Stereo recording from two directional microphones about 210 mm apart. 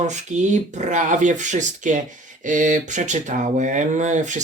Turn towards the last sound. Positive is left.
turn(degrees=-35)  # may be behind; listen again after turning